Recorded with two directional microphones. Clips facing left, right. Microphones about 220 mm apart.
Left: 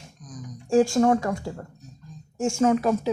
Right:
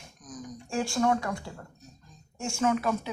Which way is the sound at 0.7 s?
45° left (ahead or behind).